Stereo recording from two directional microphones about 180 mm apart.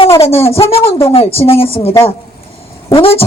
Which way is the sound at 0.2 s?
35° left (ahead or behind).